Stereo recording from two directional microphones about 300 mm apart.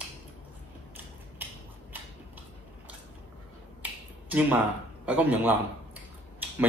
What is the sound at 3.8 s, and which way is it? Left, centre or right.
Finger snapping, centre.